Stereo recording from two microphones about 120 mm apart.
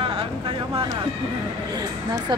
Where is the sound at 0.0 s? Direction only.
50° right (ahead or behind).